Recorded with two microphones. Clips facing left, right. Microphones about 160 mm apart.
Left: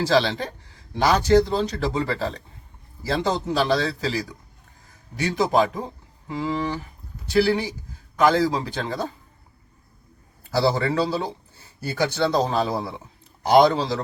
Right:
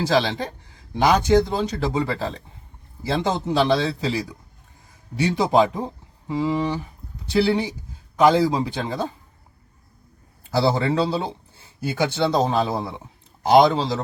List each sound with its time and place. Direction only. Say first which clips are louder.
0.0 s speech: even; 15° right (ahead or behind)
5.2 s speech: right 2 dB; 20° right (ahead or behind)
10.5 s speech: right 1 dB; 20° right (ahead or behind)